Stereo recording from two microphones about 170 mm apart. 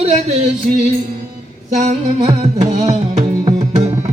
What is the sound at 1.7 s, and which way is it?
Music, 40° right (ahead or behind).